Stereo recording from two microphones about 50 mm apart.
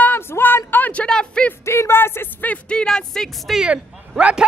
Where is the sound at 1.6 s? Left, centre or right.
Left.